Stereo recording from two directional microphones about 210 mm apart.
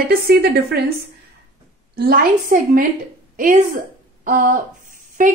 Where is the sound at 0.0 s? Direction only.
45° right (ahead or behind).